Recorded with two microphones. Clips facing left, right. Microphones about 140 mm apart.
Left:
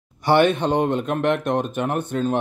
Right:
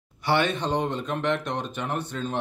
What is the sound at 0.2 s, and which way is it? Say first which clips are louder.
A man's voice: left 7 dB; 50° left (ahead or behind).